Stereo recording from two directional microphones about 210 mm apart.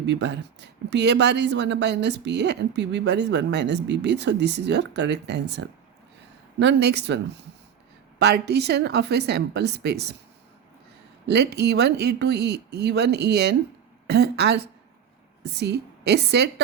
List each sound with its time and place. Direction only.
0.0 s speech: 55° right (ahead or behind)
11.3 s speech: 50° right (ahead or behind)